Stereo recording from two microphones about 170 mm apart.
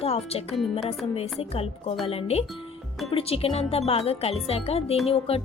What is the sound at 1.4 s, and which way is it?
A woman's voice, 35° left (ahead or behind).